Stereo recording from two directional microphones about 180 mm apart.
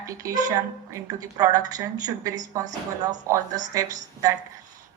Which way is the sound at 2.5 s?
15° right (ahead or behind).